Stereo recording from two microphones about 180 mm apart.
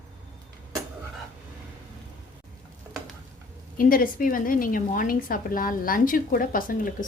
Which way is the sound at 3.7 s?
50° left (ahead or behind).